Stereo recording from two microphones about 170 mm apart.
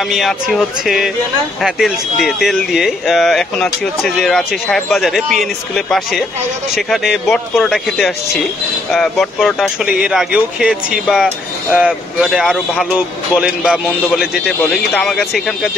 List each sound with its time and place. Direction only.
0.1 s speech: centre (ahead or behind)
14.6 s speech: 5° left (ahead or behind)